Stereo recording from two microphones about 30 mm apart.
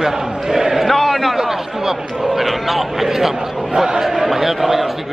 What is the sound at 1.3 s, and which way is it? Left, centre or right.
A man's voice, centre.